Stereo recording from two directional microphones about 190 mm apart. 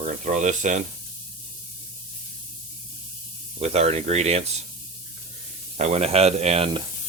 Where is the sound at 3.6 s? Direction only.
35° right (ahead or behind).